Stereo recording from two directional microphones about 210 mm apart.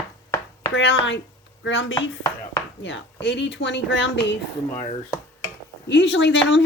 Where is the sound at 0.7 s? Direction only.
60° left (ahead or behind).